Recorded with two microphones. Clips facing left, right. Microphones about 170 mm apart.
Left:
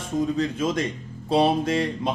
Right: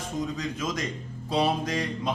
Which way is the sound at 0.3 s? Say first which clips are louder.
Left 7 dB; 30° left (ahead or behind).